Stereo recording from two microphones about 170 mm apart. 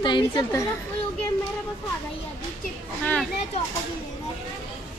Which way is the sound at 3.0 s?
5° left (ahead or behind).